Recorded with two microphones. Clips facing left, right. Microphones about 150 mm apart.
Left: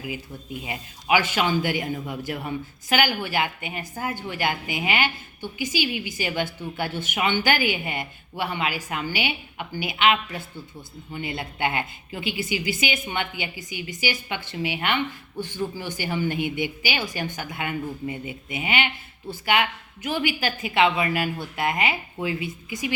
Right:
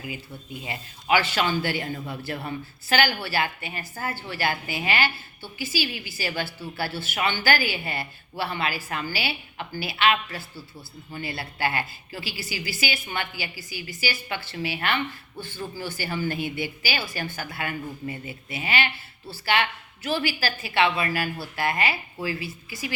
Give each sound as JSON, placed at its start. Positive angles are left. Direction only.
{"t": 0.5, "sound": "a woman's voice", "side_deg": 15}